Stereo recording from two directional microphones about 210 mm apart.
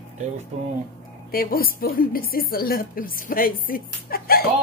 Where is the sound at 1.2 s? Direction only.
45° left (ahead or behind).